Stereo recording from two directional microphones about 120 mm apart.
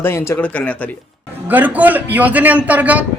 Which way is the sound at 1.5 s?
15° right (ahead or behind).